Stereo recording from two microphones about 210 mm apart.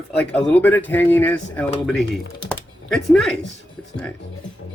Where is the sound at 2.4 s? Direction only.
Centre (ahead or behind).